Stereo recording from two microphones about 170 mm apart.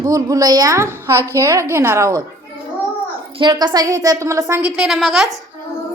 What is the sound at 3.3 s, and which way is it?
A woman's voice, 30° right (ahead or behind).